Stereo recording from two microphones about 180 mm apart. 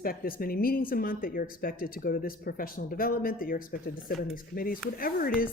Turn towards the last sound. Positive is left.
turn(degrees=55)  # may be behind; listen again after turning